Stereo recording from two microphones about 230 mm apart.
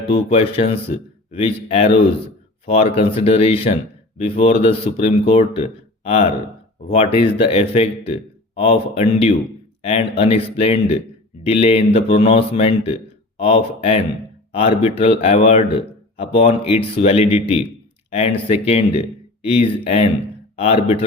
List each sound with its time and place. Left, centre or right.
0.1 s speech: left